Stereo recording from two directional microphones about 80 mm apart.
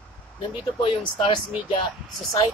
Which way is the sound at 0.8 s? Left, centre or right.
Left.